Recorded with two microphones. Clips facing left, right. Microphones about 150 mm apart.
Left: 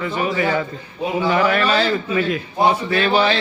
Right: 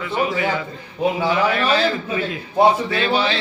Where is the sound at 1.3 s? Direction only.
50° left (ahead or behind).